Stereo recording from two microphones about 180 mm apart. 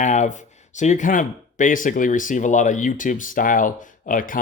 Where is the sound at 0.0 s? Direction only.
40° left (ahead or behind).